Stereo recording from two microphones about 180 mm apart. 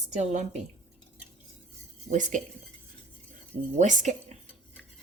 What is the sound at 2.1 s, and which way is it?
Speech, 45° right (ahead or behind).